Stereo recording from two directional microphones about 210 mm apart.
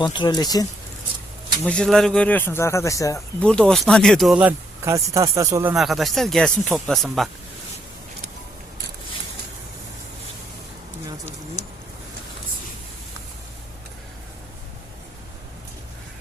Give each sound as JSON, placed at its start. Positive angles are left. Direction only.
{"t": 0.0, "sound": "speech", "side_deg": 20}
{"t": 1.6, "sound": "speech", "side_deg": 5}
{"t": 3.4, "sound": "speech", "side_deg": 5}
{"t": 5.7, "sound": "speech", "side_deg": 0}